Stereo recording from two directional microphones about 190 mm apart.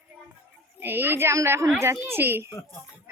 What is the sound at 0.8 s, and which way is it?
A woman's voice, 10° right (ahead or behind).